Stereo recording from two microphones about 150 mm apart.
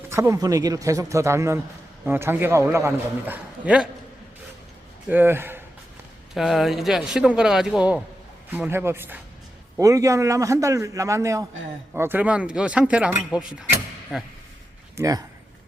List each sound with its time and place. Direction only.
0.1 s a man's voice: 20° right (ahead or behind)
5.0 s a man's voice: 15° right (ahead or behind)
6.3 s a man's voice: centre (ahead or behind)
14.9 s speech: 20° right (ahead or behind)